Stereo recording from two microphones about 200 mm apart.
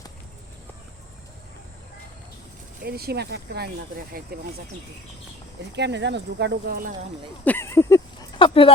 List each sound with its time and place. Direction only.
2.8 s speech: 50° right (ahead or behind)
5.7 s speech: 60° right (ahead or behind)
7.4 s a sound: 10° left (ahead or behind); by 8.7 s 25° left (ahead or behind)